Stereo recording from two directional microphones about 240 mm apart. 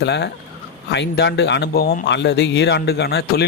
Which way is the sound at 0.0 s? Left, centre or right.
Left.